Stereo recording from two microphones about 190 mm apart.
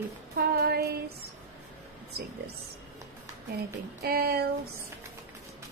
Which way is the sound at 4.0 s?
55° right (ahead or behind).